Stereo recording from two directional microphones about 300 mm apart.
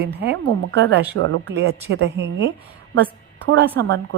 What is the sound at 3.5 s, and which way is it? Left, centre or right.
Speech, right.